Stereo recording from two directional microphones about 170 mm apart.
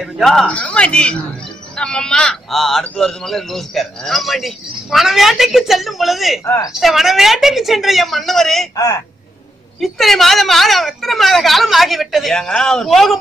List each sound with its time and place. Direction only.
0.0 s speech: centre (ahead or behind)
6.4 s a woman's voice: 15° left (ahead or behind)
6.8 s speech: centre (ahead or behind)
8.7 s speech: 20° left (ahead or behind)
9.8 s speech: centre (ahead or behind)